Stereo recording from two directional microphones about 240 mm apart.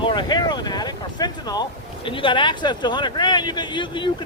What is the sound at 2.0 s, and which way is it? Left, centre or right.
Speech, left.